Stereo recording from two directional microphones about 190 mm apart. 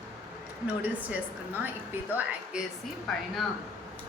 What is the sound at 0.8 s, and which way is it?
Speech, 10° right (ahead or behind).